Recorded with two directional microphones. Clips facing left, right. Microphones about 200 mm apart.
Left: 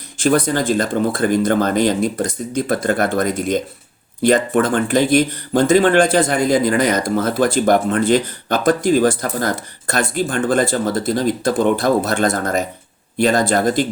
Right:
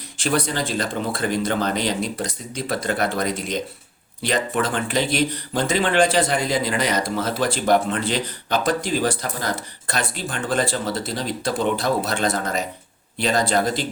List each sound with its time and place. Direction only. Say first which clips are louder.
0.2 s speech: left 7 dB; 45° left (ahead or behind)